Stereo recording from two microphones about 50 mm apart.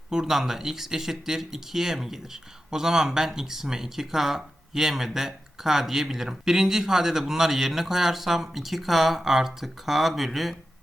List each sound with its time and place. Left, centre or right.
0.1 s speech: centre